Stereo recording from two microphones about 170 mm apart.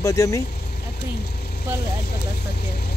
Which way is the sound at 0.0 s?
20° left (ahead or behind).